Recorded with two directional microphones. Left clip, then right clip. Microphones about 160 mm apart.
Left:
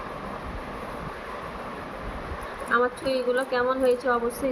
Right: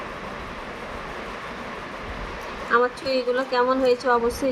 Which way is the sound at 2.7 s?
65° right (ahead or behind).